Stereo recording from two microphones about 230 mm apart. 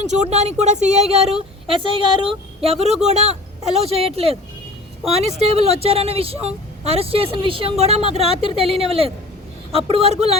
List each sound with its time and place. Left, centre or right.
0.0 s speech: right